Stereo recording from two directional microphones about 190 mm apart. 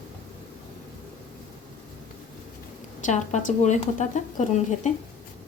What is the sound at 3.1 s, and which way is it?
A woman's voice, 40° left (ahead or behind).